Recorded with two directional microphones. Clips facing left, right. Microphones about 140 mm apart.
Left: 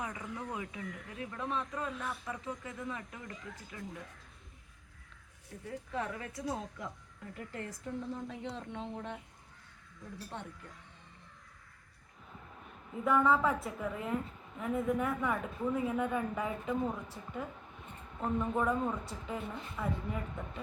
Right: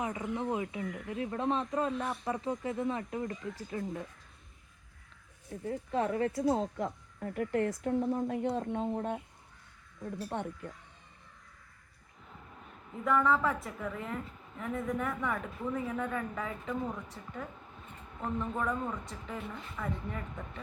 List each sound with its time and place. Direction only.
0.0 s speech: 25° right (ahead or behind)
5.5 s speech: 30° right (ahead or behind)
7.2 s speech: 55° right (ahead or behind)
10.3 s speech: 55° right (ahead or behind)
13.1 s a woman's voice: 5° left (ahead or behind)